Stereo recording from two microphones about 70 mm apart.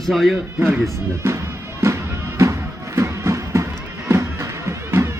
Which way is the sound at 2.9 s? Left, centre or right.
Right.